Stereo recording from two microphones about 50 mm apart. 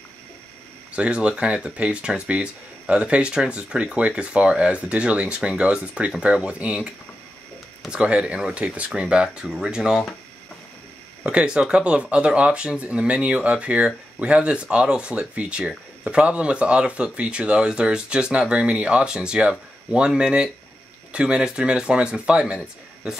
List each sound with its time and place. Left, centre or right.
0.9 s speech: right
7.9 s speech: centre
9.0 s speech: centre
11.2 s speech: centre